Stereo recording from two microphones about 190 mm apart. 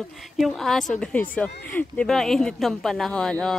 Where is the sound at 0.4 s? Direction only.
Centre (ahead or behind).